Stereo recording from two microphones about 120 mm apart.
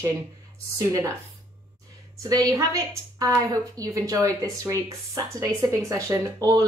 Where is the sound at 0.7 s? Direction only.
30° right (ahead or behind).